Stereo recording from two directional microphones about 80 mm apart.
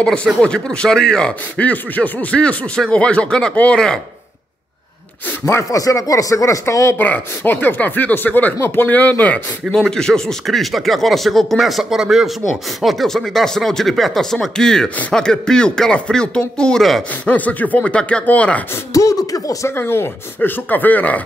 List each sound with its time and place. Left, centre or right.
0.0 s speech: centre
5.4 s speech: left
7.0 s speech: left
9.8 s speech: centre
12.8 s speech: centre
17.3 s speech: centre
18.9 s speech: left
19.7 s speech: left